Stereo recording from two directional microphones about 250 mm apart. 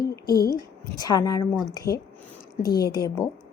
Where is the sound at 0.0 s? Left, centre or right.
Left.